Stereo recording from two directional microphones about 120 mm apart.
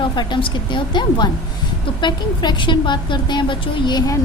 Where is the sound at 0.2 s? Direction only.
40° left (ahead or behind).